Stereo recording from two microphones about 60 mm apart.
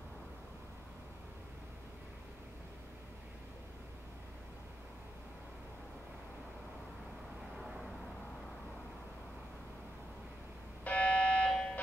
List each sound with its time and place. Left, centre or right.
7.5 s vehicle: centre
10.8 s fire alarm: left